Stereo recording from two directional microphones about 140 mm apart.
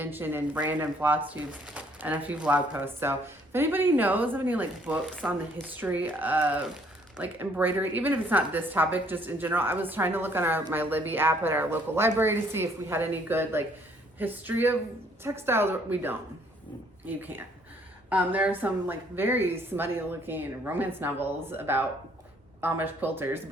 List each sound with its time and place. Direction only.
0.0 s a woman's voice: 15° right (ahead or behind)